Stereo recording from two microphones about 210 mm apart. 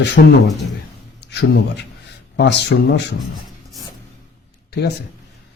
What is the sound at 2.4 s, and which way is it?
Speech, 55° left (ahead or behind).